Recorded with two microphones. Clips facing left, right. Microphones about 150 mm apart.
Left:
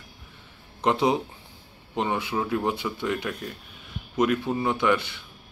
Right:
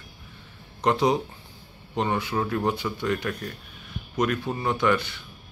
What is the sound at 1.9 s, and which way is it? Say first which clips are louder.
Speech: right 1 dB; 15° left (ahead or behind).